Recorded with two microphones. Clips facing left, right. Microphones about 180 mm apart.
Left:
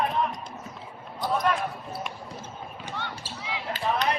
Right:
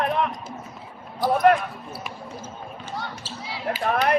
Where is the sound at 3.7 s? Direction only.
55° right (ahead or behind).